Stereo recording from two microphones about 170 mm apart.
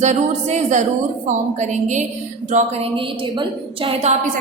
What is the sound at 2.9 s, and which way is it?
A woman's voice, 30° right (ahead or behind).